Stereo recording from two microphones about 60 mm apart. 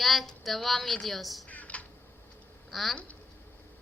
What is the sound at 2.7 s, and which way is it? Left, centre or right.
Speech, centre.